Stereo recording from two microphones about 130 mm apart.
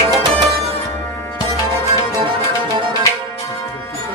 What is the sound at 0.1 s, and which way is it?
Music, 30° right (ahead or behind).